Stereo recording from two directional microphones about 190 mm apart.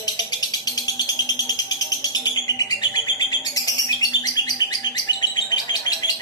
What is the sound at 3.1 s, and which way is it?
Bird, 20° left (ahead or behind).